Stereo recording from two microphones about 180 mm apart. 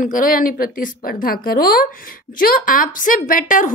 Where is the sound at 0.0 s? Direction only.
50° left (ahead or behind).